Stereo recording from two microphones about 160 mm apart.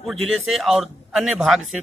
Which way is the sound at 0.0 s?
Centre (ahead or behind).